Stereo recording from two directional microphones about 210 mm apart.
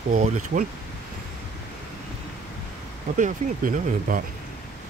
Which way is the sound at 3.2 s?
40° right (ahead or behind).